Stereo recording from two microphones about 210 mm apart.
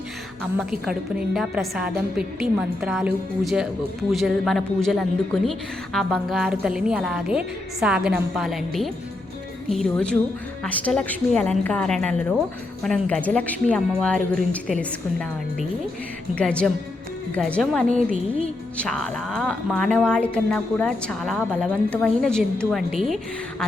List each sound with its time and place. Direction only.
0.5 s a woman's voice: 5° right (ahead or behind)
16.4 s a woman's voice: 5° left (ahead or behind)
17.8 s a woman's voice: 35° right (ahead or behind)
18.8 s a woman's voice: 5° left (ahead or behind)